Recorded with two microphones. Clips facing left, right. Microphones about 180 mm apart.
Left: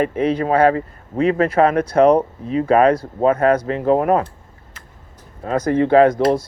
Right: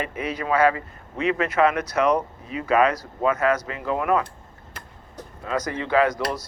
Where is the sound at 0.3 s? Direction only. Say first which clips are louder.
Left 3 dB; 55° left (ahead or behind).